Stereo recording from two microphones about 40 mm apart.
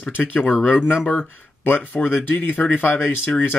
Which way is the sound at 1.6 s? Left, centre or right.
Left.